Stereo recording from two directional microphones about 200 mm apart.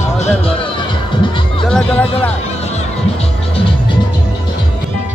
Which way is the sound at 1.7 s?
5° left (ahead or behind).